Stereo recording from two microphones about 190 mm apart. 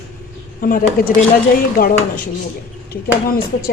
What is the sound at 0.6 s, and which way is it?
A woman's voice, 50° left (ahead or behind).